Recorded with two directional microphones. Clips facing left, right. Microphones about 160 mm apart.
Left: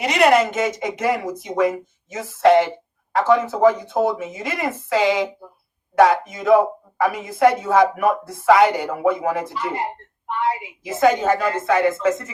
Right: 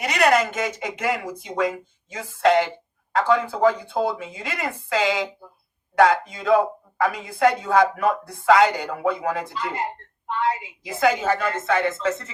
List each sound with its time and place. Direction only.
0.1 s speech: 25° left (ahead or behind)
11.2 s speech: 40° left (ahead or behind)